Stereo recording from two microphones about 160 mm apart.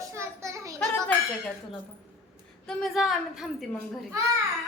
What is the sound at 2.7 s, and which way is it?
Speech, centre (ahead or behind).